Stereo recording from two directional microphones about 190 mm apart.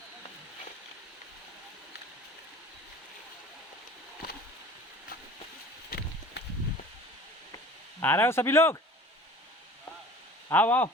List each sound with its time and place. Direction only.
5.9 s a sound: 60° left (ahead or behind)
8.0 s speech: 10° left (ahead or behind)
10.5 s speech: 10° left (ahead or behind)